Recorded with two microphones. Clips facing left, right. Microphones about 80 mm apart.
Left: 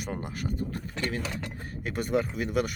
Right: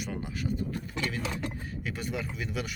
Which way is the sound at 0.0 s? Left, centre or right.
Left.